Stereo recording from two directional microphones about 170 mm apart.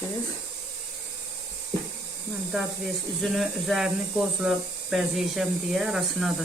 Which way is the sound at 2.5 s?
Centre (ahead or behind).